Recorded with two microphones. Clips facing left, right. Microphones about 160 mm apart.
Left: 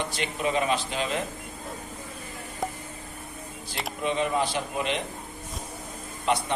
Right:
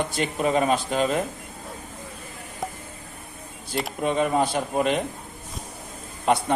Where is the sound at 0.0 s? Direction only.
45° right (ahead or behind).